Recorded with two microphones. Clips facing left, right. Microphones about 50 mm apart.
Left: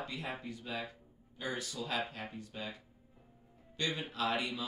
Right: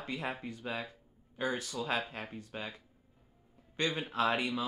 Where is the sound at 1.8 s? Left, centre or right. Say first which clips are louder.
Right 5 dB; right.